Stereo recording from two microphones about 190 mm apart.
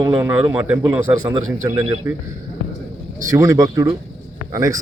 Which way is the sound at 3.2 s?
15° right (ahead or behind).